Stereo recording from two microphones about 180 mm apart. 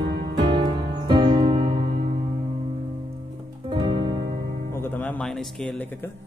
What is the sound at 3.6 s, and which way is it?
Music, 25° right (ahead or behind).